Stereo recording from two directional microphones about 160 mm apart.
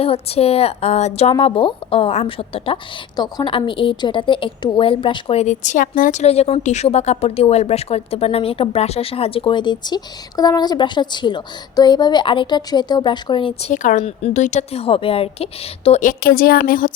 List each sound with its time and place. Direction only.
0.0 s a woman's voice: 40° left (ahead or behind)
14.0 s speech: 40° left (ahead or behind); by 16.9 s 65° left (ahead or behind)